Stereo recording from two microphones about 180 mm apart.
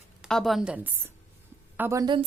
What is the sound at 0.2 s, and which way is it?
A woman's voice, centre (ahead or behind).